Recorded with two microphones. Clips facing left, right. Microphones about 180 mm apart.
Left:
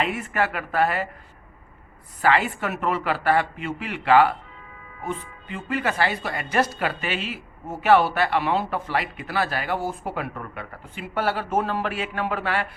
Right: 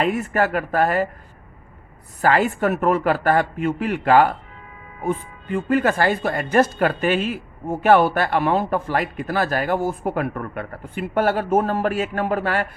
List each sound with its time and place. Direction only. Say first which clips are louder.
0.0 s a woman's voice: right 5 dB; 40° right (ahead or behind)
2.2 s a woman's voice: right 4 dB; 45° right (ahead or behind)